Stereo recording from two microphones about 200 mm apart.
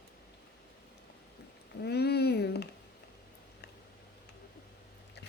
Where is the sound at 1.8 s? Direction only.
55° left (ahead or behind).